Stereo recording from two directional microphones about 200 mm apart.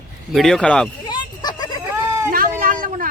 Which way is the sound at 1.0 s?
20° left (ahead or behind).